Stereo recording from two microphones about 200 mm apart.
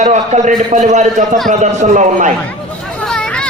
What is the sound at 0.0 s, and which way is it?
A man's voice, 40° right (ahead or behind).